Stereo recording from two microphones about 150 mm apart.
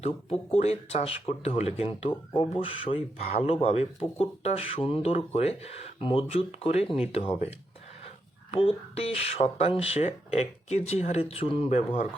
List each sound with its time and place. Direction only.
0.0 s speech: 45° left (ahead or behind)
8.4 s speech: 40° left (ahead or behind)